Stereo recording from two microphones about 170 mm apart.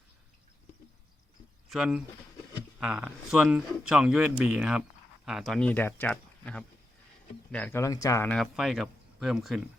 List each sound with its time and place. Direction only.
1.7 s a man's voice: 5° right (ahead or behind); by 8.3 s 20° left (ahead or behind)
8.3 s a man's voice: centre (ahead or behind)